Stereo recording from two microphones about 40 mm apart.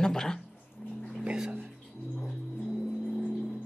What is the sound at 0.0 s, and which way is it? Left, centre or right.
Speech, centre.